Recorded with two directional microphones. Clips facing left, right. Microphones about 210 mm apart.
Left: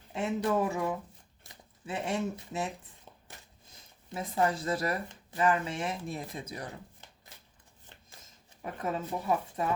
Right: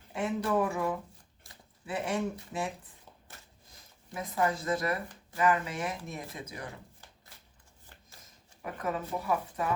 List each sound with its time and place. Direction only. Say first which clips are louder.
0.1 s speech: even; 20° left (ahead or behind)
4.1 s speech: left 1 dB; 25° left (ahead or behind)
8.6 s speech: even; 25° left (ahead or behind)